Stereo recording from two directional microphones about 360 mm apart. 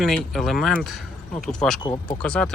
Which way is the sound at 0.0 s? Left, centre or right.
Centre.